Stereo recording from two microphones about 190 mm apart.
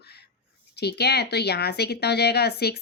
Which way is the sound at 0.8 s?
60° left (ahead or behind).